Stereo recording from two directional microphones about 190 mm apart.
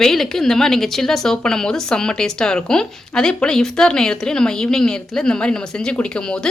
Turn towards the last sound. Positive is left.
turn(degrees=5)  # may be behind; listen again after turning